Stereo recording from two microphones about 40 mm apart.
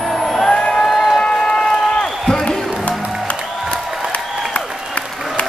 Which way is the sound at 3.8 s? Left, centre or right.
Centre.